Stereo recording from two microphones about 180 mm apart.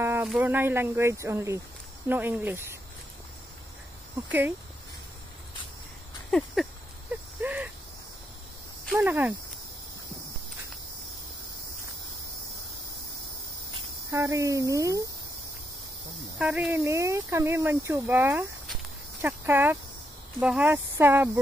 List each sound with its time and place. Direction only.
0.0 s a sound: 15° right (ahead or behind)
0.3 s speech: 10° right (ahead or behind)
4.3 s speech: 10° right (ahead or behind)
6.3 s a sound: centre (ahead or behind)
8.9 s speech: 10° right (ahead or behind)
14.1 s speech: 15° right (ahead or behind)
16.3 s speech: 5° right (ahead or behind)